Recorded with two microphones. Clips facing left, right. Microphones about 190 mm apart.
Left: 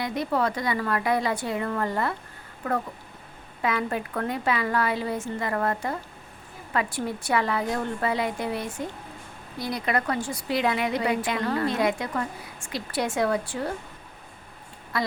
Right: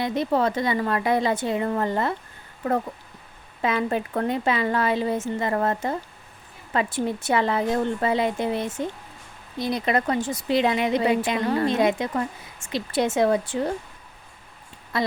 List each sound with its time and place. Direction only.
0.0 s a woman's voice: 25° right (ahead or behind)
3.6 s a woman's voice: 25° right (ahead or behind)
14.9 s a woman's voice: 25° right (ahead or behind)